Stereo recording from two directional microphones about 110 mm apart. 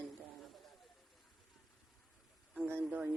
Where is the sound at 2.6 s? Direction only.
20° right (ahead or behind).